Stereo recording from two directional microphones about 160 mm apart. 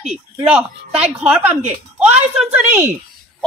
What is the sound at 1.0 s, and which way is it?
Speech, 10° right (ahead or behind).